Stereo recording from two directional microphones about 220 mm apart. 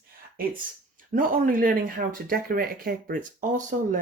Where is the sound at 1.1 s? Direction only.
40° right (ahead or behind).